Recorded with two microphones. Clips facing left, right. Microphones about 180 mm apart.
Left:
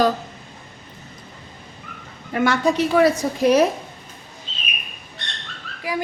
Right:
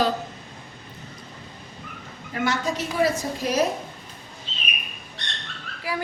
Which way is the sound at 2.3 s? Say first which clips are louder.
Left 7 dB; 60° left (ahead or behind).